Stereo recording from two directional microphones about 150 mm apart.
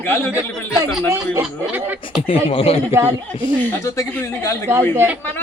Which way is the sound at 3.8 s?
20° left (ahead or behind).